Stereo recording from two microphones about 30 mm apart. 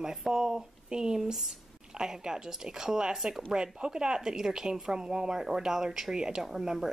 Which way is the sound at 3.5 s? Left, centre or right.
Right.